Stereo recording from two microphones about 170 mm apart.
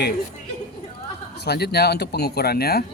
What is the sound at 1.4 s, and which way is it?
A man's voice, 70° left (ahead or behind).